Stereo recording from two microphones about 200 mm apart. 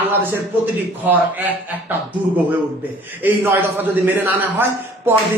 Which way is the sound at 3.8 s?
10° right (ahead or behind).